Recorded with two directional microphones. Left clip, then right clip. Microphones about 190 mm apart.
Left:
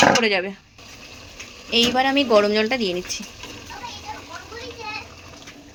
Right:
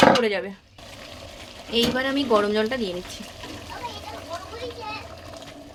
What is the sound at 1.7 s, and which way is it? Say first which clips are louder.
A woman's voice: left 5 dB; 15° left (ahead or behind).